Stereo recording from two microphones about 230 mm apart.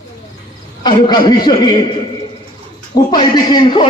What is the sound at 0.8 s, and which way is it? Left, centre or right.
A man's voice, centre.